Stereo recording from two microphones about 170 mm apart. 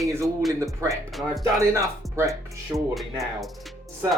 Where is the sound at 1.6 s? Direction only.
15° right (ahead or behind).